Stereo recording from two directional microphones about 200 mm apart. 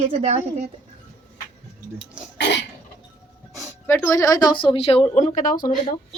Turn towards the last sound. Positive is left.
turn(degrees=45)  # may be behind; listen again after turning